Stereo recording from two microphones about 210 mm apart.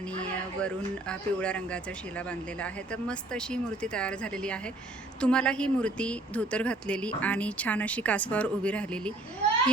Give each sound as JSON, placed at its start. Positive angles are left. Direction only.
{"t": 0.0, "sound": "speech", "side_deg": 5}